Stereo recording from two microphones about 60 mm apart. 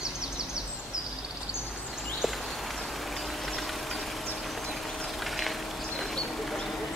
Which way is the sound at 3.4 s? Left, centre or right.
Centre.